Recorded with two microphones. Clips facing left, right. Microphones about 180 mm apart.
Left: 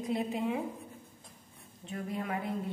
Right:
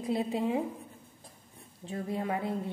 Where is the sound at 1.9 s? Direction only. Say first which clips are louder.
Right 3 dB; 25° right (ahead or behind).